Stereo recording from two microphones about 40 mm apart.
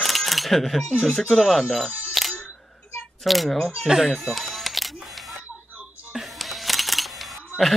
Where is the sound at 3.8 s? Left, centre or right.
Centre.